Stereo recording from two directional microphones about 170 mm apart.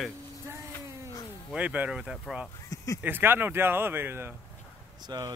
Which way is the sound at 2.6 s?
20° left (ahead or behind).